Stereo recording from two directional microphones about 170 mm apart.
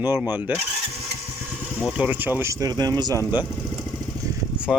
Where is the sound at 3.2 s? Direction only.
25° left (ahead or behind).